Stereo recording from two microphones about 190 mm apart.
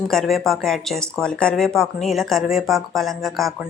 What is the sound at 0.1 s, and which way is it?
Speech, centre (ahead or behind).